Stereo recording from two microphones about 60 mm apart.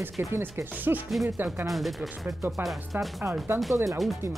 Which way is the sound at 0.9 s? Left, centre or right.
Right.